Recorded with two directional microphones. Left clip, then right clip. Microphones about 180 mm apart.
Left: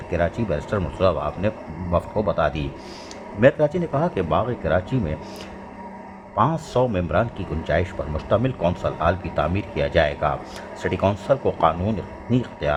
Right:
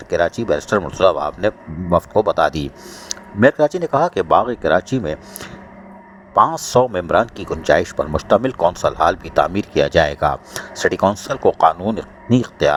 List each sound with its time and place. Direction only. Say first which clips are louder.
0.1 s a man's voice: right 6 dB; 35° right (ahead or behind)
6.3 s a man's voice: right 7 dB; 40° right (ahead or behind)